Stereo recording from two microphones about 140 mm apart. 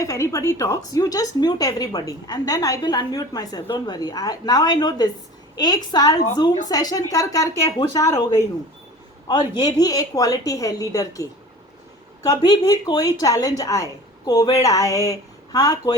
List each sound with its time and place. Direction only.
0.0 s a woman's voice: 20° left (ahead or behind)
9.2 s a woman's voice: 30° left (ahead or behind)